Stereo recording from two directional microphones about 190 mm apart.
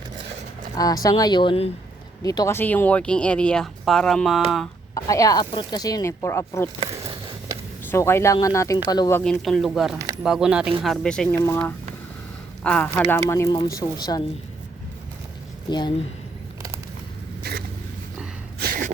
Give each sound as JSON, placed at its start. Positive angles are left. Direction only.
{"t": 0.8, "sound": "speech", "side_deg": 20}
{"t": 4.9, "sound": "speech", "side_deg": 20}
{"t": 7.9, "sound": "speech", "side_deg": 15}
{"t": 9.2, "sound": "speech", "side_deg": 0}
{"t": 15.7, "sound": "speech", "side_deg": 25}
{"t": 18.6, "sound": "gasp", "side_deg": -50}